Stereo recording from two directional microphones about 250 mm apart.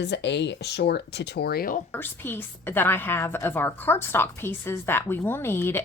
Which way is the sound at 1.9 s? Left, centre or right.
Centre.